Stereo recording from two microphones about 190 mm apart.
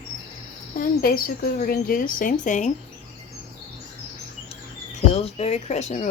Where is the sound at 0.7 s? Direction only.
50° left (ahead or behind).